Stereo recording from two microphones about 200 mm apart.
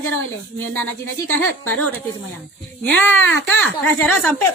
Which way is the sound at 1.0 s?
90° left.